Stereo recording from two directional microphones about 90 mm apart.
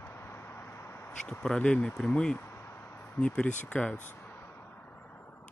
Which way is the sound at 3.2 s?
10° left (ahead or behind).